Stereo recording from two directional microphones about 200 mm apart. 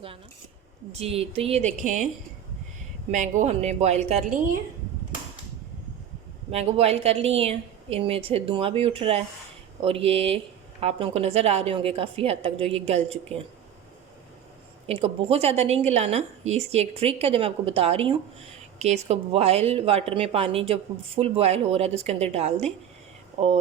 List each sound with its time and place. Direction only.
0.9 s a woman's voice: 30° right (ahead or behind)
3.1 s a woman's voice: 40° right (ahead or behind)
6.5 s speech: 30° right (ahead or behind)
14.8 s a woman's voice: 30° right (ahead or behind)